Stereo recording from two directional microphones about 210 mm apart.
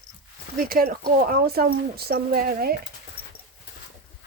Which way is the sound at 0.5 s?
45° right (ahead or behind).